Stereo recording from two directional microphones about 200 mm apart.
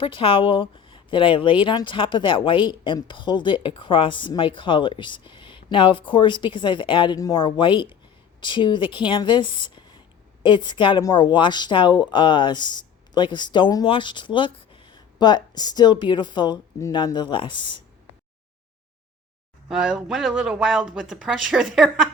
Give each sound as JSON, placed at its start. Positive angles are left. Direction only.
{"t": 0.0, "sound": "a woman's voice", "side_deg": 25}
{"t": 19.6, "sound": "speech", "side_deg": -5}